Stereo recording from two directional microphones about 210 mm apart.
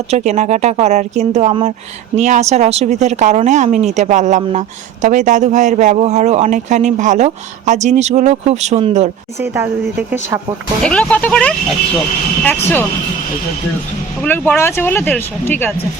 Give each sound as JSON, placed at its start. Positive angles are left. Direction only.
{"t": 0.1, "sound": "a man's voice", "side_deg": -30}
{"t": 9.4, "sound": "speech", "side_deg": -10}
{"t": 10.8, "sound": "speech", "side_deg": 5}
{"t": 14.2, "sound": "speech", "side_deg": 10}